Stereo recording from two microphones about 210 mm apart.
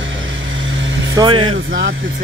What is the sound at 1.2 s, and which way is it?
Speech, 25° right (ahead or behind).